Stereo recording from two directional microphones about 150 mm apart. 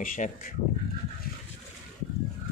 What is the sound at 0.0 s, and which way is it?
Speech, 65° left (ahead or behind).